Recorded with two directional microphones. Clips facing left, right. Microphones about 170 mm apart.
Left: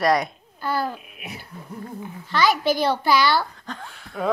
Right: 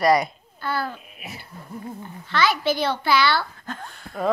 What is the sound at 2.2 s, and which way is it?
A child's voice, 40° left (ahead or behind).